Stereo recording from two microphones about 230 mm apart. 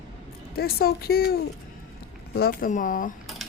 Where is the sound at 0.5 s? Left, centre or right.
Left.